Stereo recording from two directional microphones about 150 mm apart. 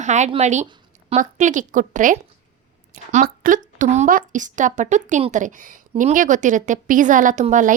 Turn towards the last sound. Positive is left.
turn(degrees=-60)  # may be behind; listen again after turning